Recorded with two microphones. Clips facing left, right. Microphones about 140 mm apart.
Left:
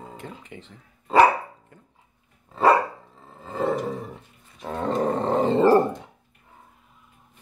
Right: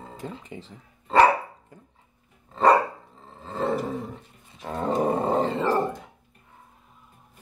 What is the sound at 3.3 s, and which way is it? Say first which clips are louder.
Roar: even; 10° left (ahead or behind).